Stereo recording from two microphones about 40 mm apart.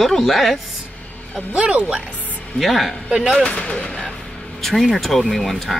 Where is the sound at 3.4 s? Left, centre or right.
Left.